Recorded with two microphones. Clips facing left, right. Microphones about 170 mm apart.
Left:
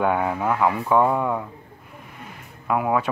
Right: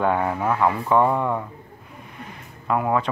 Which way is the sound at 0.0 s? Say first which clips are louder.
Even; 5° left (ahead or behind).